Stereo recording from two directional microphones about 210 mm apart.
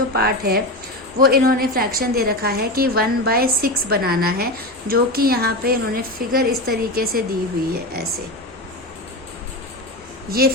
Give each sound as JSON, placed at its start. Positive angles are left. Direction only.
{"t": 0.1, "sound": "a woman's voice", "side_deg": -45}
{"t": 10.2, "sound": "a woman's voice", "side_deg": -45}